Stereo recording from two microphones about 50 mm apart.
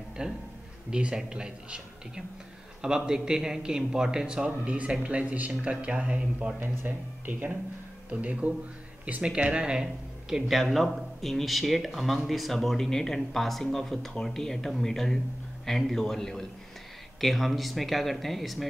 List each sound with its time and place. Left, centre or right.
0.2 s a man's voice: centre
6.6 s speech: right
8.1 s speech: right
10.5 s speech: centre